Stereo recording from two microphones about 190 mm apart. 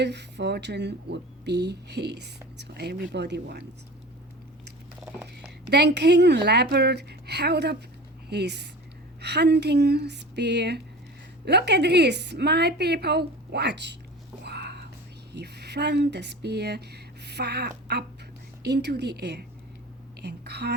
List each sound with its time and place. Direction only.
0.0 s a woman's voice: 65° right (ahead or behind)
5.6 s a woman's voice: 60° right (ahead or behind)
14.4 s whispering: 60° right (ahead or behind)
15.3 s a woman's voice: 60° right (ahead or behind)